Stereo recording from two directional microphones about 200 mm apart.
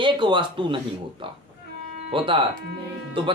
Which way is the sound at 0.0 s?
25° right (ahead or behind).